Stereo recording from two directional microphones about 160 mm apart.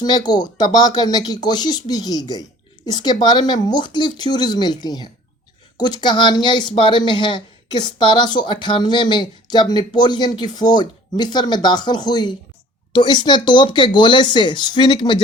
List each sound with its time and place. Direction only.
0.0 s speech: 25° left (ahead or behind)